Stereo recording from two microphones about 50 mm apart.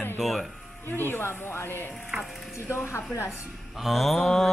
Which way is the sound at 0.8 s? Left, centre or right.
Left.